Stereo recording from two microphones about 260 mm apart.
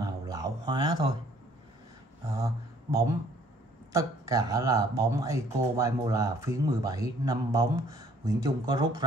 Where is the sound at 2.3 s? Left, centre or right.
Centre.